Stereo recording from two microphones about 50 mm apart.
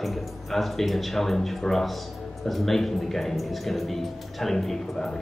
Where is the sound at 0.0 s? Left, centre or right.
Centre.